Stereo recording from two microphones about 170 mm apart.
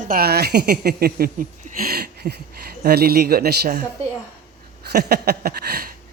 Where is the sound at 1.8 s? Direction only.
65° right (ahead or behind).